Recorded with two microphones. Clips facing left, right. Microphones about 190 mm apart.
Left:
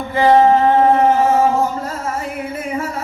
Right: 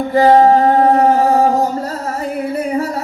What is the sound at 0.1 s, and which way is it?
Music, 40° right (ahead or behind).